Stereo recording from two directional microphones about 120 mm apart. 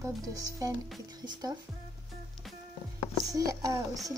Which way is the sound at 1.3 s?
35° right (ahead or behind).